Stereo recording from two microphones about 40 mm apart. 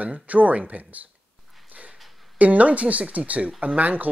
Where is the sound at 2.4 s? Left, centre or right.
Right.